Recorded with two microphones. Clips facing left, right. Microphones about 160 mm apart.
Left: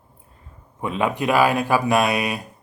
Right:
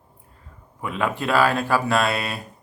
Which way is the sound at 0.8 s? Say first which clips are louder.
Left 3 dB; 20° left (ahead or behind).